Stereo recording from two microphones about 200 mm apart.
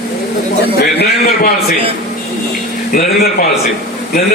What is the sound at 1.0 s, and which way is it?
Speech, 50° left (ahead or behind).